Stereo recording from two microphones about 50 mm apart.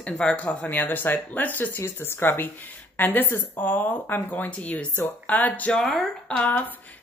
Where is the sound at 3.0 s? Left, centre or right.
Left.